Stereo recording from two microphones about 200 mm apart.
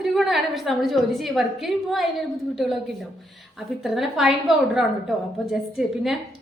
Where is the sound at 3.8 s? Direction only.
Centre (ahead or behind).